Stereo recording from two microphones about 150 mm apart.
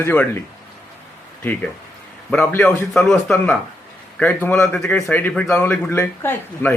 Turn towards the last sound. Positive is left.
turn(degrees=15)  # may be behind; listen again after turning